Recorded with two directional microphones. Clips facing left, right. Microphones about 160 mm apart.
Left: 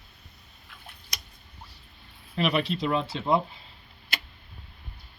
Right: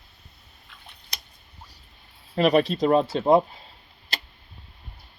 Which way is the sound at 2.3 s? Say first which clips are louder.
Right 7 dB; 40° right (ahead or behind).